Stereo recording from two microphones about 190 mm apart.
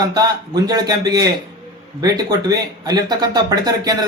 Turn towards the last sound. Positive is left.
turn(degrees=-20)  # may be behind; listen again after turning